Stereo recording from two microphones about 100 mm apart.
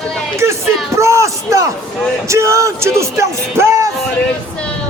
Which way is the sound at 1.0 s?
30° right (ahead or behind).